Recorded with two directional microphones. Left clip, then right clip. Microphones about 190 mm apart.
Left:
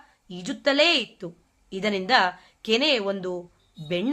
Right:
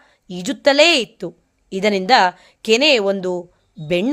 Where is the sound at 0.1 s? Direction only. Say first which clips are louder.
Right 9 dB; 40° right (ahead or behind).